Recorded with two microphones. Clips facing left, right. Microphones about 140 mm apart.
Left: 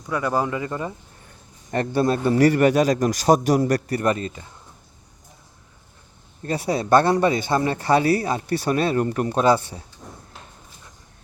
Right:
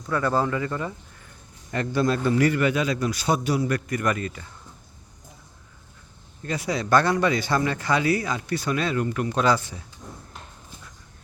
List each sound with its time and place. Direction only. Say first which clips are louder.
0.0 s speech: even; 15° left (ahead or behind)
6.4 s speech: left 4 dB; 35° left (ahead or behind)
9.4 s speech: left 4 dB; 25° left (ahead or behind)